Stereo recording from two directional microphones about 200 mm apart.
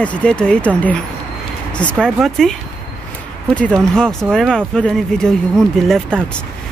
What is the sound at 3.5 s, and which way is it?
Speech, 5° left (ahead or behind).